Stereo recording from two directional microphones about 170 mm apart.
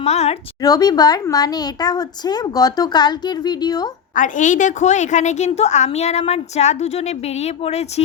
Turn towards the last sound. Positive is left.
turn(degrees=40)  # may be behind; listen again after turning